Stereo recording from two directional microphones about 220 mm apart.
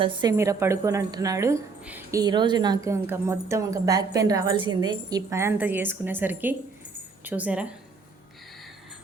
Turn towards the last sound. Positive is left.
turn(degrees=-5)  # may be behind; listen again after turning